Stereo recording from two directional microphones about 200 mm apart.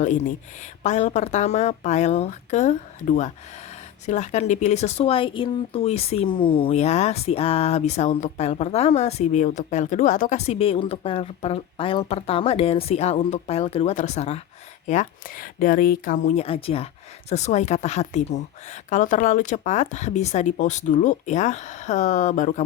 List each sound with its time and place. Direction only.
0.8 s speech: 35° left (ahead or behind)